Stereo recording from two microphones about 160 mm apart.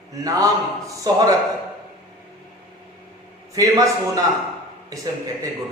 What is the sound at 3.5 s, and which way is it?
Speech, 20° right (ahead or behind).